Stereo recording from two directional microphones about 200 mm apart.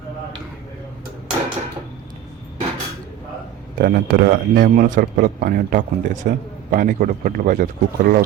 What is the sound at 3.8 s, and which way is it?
Speech, 45° right (ahead or behind).